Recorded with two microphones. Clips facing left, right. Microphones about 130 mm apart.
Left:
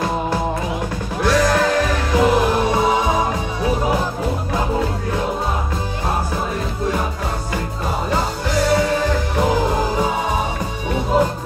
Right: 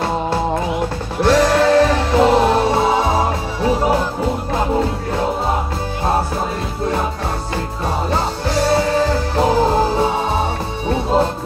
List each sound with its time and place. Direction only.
1.2 s music: 30° right (ahead or behind)
8.1 s music: 25° right (ahead or behind)